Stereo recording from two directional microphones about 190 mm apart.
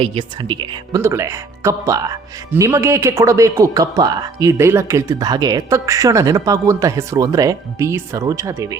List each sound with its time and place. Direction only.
0.0 s a woman's voice: 25° right (ahead or behind)